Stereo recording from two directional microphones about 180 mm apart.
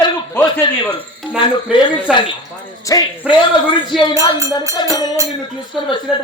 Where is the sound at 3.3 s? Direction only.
5° right (ahead or behind).